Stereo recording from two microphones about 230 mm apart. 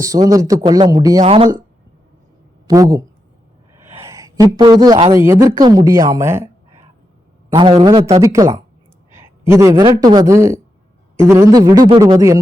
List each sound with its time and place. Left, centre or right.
0.0 s a man's voice: centre
2.6 s speech: centre
4.0 s speech: centre
7.5 s a man's voice: centre